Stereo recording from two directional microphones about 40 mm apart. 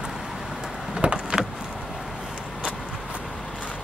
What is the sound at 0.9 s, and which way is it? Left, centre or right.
Vehicle, right.